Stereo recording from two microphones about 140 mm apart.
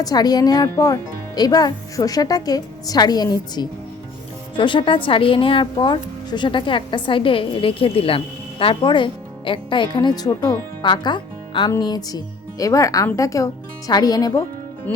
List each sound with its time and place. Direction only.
0.0 s a woman's voice: 30° left (ahead or behind)
14.9 s music: 10° left (ahead or behind)